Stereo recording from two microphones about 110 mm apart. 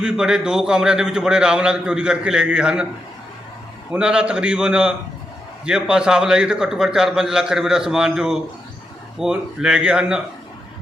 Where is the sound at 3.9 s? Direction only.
10° right (ahead or behind).